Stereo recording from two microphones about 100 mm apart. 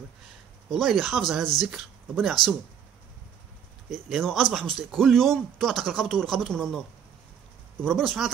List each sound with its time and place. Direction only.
0.7 s speech: 5° left (ahead or behind)
2.4 s speech: 45° left (ahead or behind)
3.9 s speech: centre (ahead or behind)
7.8 s speech: 5° left (ahead or behind)